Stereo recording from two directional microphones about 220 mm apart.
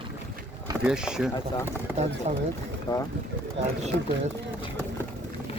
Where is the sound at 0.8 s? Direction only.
5° right (ahead or behind).